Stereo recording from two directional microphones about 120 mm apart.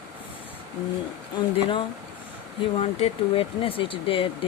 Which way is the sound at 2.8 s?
55° left (ahead or behind).